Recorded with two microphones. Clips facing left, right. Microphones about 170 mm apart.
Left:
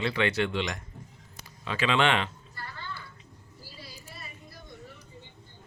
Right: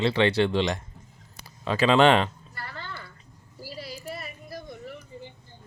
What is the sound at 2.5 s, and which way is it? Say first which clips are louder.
Music: right 2 dB; 90° right.